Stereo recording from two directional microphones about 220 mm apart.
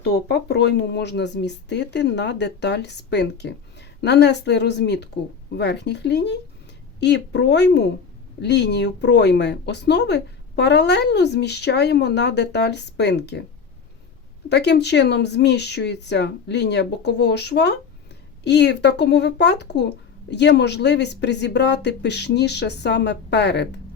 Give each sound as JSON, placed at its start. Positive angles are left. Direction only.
{"t": 0.0, "sound": "speech", "side_deg": 50}
{"t": 14.5, "sound": "speech", "side_deg": 50}